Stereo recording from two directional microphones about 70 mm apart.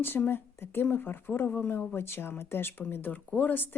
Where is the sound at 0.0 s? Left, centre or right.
Left.